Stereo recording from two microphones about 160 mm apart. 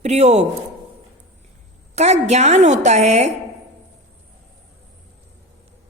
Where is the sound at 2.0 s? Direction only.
45° right (ahead or behind).